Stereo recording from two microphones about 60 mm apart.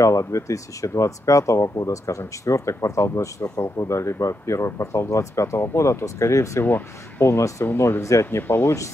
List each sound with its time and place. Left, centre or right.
0.0 s speech: left
6.6 s speech: left
7.2 s speech: left